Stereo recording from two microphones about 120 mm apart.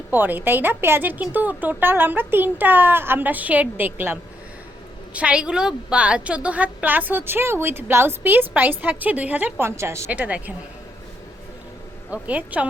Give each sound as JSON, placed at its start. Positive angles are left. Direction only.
{"t": 0.1, "sound": "a woman's voice", "side_deg": -15}
{"t": 10.1, "sound": "a woman's voice", "side_deg": -10}
{"t": 12.1, "sound": "a woman's voice", "side_deg": -10}